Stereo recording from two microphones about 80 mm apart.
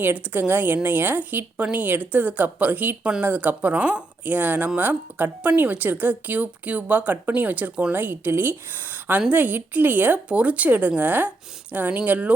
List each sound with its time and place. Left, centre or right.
0.0 s speech: right